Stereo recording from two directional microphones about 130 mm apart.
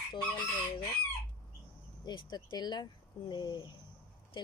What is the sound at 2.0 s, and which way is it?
Speech, 35° left (ahead or behind).